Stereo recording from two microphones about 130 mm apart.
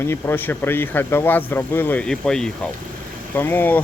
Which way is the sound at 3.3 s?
15° left (ahead or behind).